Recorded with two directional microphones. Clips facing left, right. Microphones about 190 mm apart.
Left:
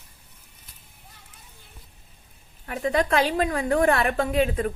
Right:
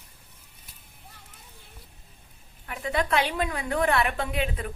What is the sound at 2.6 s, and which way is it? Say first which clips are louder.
A woman's voice: left 5 dB; 45° left (ahead or behind).